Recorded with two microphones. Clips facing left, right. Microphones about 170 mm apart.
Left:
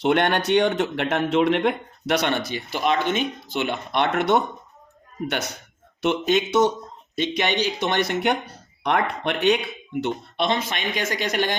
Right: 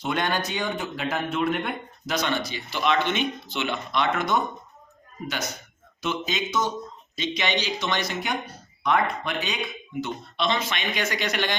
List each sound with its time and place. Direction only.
0.0 s speech: 65° left (ahead or behind)
7.2 s speech: 55° left (ahead or behind); by 9.6 s 70° left (ahead or behind)
10.0 s speech: 55° left (ahead or behind)